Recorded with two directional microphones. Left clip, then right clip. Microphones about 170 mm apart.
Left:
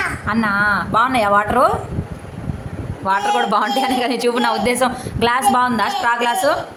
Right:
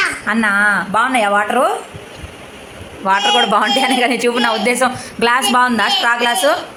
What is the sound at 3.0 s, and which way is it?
A man's voice, 15° right (ahead or behind).